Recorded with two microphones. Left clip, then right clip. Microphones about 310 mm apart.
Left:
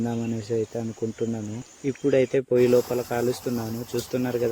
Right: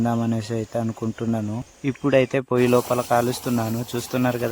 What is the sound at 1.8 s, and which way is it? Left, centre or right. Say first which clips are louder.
Speech: right 2 dB; centre.